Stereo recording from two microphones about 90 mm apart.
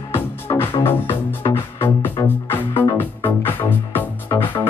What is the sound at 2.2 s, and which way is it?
Music, 50° left (ahead or behind).